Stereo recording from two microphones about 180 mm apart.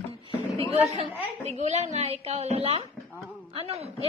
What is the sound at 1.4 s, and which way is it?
A woman's voice, 40° right (ahead or behind).